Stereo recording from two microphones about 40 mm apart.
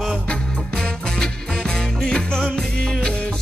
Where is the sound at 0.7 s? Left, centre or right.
Centre.